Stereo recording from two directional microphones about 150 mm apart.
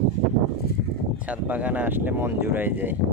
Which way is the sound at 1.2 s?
10° right (ahead or behind).